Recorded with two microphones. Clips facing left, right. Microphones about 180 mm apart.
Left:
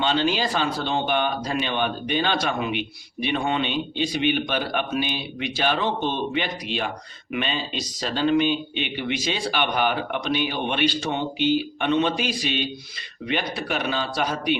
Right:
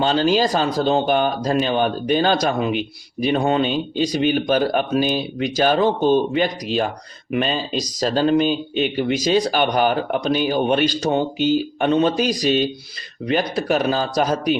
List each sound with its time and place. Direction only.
0.0 s speech: 40° right (ahead or behind)